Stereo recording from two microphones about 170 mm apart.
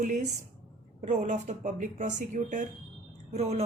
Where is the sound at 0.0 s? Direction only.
45° right (ahead or behind).